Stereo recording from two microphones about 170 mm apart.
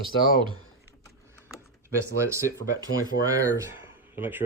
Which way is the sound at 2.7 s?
20° right (ahead or behind).